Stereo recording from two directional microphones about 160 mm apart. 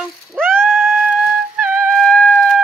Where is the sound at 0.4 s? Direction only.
5° left (ahead or behind).